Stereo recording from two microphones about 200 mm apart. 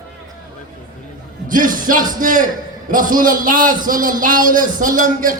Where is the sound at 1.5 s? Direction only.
45° right (ahead or behind).